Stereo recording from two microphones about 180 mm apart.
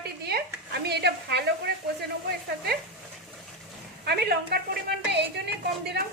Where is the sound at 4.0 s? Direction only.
60° right (ahead or behind).